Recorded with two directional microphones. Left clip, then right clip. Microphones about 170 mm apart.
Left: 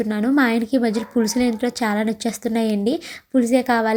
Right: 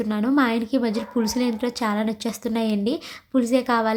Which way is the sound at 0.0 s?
15° left (ahead or behind).